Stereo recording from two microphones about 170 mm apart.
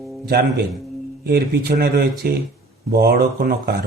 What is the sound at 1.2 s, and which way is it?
Speech, 70° right (ahead or behind).